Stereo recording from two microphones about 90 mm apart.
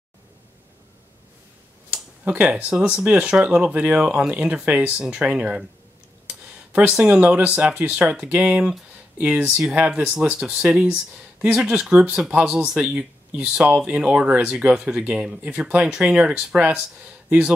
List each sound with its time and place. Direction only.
1.9 s speech: 15° right (ahead or behind)
6.2 s a sound: 15° right (ahead or behind)
6.9 s speech: 10° right (ahead or behind)